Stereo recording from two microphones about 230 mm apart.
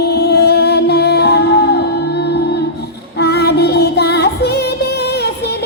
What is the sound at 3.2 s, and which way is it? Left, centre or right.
Music, left.